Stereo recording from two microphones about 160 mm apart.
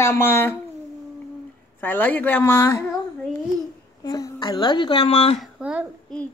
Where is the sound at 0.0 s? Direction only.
15° left (ahead or behind).